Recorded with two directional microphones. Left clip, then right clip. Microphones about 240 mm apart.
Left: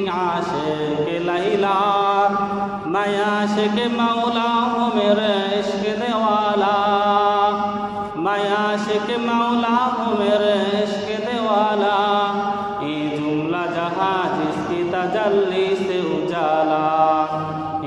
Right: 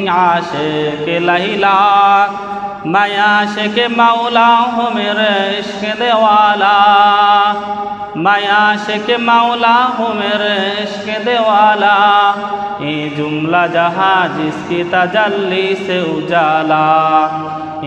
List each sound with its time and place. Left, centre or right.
0.1 s chant: right
13.5 s chant: right